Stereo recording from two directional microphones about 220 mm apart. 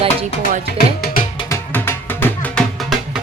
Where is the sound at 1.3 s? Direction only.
10° left (ahead or behind).